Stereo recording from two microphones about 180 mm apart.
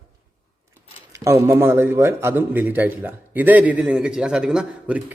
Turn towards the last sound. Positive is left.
turn(degrees=-5)  # may be behind; listen again after turning